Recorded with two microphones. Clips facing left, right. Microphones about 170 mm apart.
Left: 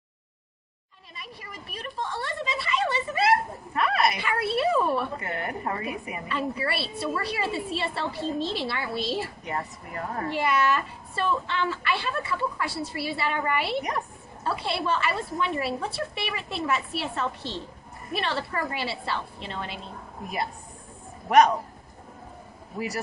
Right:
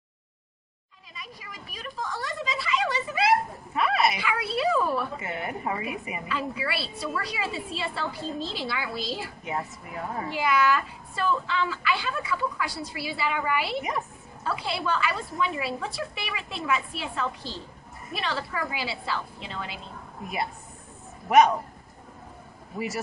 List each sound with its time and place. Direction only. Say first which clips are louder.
1.2 s a woman's voice: left 2 dB; centre (ahead or behind)
2.0 s speech: left 1 dB; 25° left (ahead or behind)
2.3 s a woman's voice: even; centre (ahead or behind)
21.3 s a woman's voice: even; centre (ahead or behind)